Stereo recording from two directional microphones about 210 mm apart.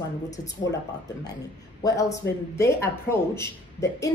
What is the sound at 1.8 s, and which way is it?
Speech, 15° left (ahead or behind).